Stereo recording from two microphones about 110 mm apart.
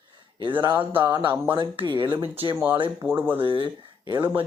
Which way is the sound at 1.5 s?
45° right (ahead or behind).